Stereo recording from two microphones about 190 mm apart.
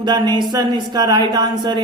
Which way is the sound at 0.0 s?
20° right (ahead or behind).